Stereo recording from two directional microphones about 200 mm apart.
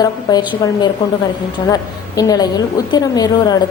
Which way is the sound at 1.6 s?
20° left (ahead or behind).